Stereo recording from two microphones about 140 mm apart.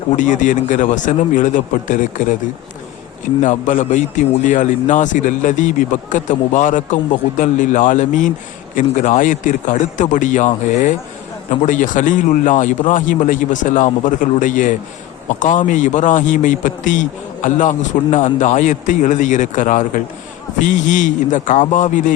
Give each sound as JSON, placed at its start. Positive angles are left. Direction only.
{"t": 0.2, "sound": "a man's voice", "side_deg": 65}
{"t": 3.4, "sound": "a man's voice", "side_deg": 60}